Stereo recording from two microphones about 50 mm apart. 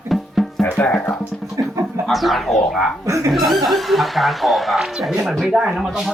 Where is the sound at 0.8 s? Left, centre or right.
Left.